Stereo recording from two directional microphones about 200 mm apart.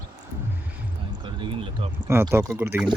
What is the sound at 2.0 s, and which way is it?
Speech, 10° right (ahead or behind).